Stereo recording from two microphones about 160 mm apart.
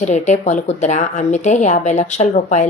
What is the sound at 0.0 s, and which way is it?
A woman's voice, 45° left (ahead or behind).